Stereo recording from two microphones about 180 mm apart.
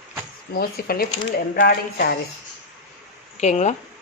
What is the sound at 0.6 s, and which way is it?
Speech, 60° left (ahead or behind).